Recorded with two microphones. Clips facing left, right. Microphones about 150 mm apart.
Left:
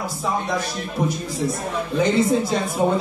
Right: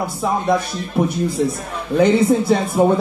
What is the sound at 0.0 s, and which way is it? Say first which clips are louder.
A man's voice: right 5 dB; 60° right (ahead or behind).